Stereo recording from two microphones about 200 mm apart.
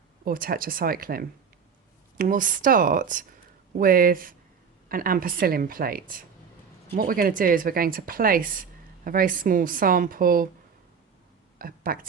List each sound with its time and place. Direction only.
0.3 s speech: 45° right (ahead or behind)
11.6 s speech: 45° right (ahead or behind)